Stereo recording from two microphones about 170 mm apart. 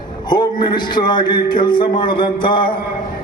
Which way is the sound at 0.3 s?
25° left (ahead or behind).